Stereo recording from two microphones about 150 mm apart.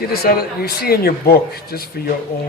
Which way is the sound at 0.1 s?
90° left.